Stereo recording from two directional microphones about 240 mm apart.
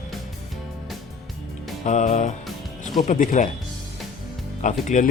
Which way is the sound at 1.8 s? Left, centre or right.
Left.